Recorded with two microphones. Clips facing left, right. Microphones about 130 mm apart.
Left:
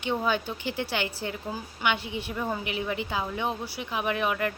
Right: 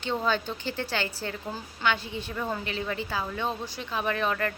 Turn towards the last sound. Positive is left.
turn(degrees=15)  # may be behind; listen again after turning